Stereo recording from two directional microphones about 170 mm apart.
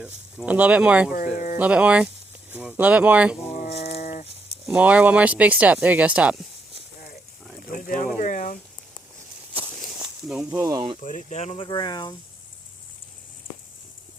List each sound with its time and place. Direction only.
0.0 s speech: 5° right (ahead or behind)
1.1 s speech: 50° left (ahead or behind)
1.5 s speech: 5° right (ahead or behind)
3.5 s a sound: 40° left (ahead or behind)
4.6 s speech: 10° right (ahead or behind)
7.7 s a sound: 55° left (ahead or behind)
9.8 s snake: 5° right (ahead or behind)
10.5 s speech: 20° right (ahead or behind)
11.0 s speech: 45° left (ahead or behind)
11.7 s speech: 25° left (ahead or behind)